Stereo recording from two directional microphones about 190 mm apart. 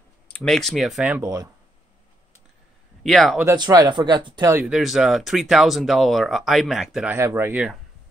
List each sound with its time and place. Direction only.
0.3 s speech: centre (ahead or behind)
1.2 s speech: 20° right (ahead or behind)
3.0 s speech: centre (ahead or behind)
3.4 s speech: 20° right (ahead or behind)
4.6 s speech: centre (ahead or behind)
7.2 s speech: 15° right (ahead or behind)